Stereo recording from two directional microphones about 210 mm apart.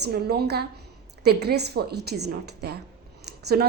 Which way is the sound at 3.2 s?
50° right (ahead or behind).